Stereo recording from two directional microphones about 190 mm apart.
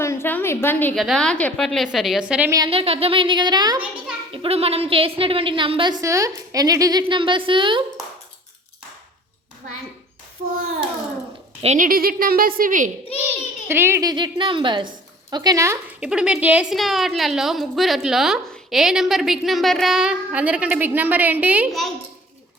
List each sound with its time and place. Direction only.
0.0 s a sound: 15° left (ahead or behind)
0.9 s a woman's voice: centre (ahead or behind)
2.6 s a woman's voice: 30° right (ahead or behind)
11.6 s a woman's voice: 40° right (ahead or behind)
13.7 s a woman's voice: 10° right (ahead or behind)
16.0 s a woman's voice: 5° right (ahead or behind)